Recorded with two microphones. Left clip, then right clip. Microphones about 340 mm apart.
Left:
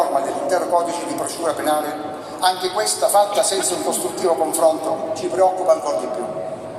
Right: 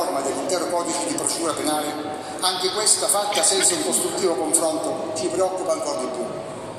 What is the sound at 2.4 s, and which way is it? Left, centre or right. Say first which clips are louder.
Speech: left 6 dB; left.